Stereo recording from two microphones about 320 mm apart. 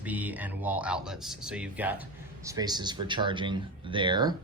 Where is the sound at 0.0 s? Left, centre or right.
Centre.